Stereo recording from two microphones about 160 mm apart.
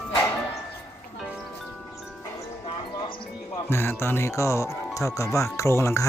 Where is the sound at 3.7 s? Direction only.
15° left (ahead or behind).